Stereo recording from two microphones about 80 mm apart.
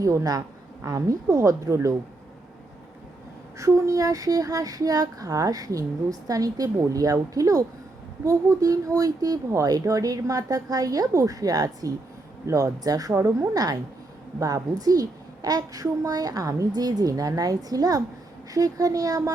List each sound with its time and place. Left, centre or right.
0.0 s speech: right
3.6 s speech: right